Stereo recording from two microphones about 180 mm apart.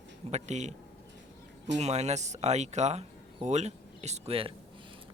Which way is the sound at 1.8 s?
40° right (ahead or behind).